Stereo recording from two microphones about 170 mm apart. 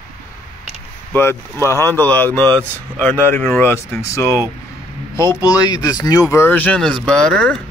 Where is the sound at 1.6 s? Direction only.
15° left (ahead or behind).